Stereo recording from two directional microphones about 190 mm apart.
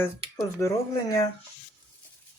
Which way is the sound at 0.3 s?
15° left (ahead or behind).